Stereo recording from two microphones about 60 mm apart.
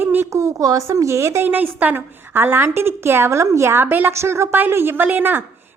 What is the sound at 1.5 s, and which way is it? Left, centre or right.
A woman's voice, right.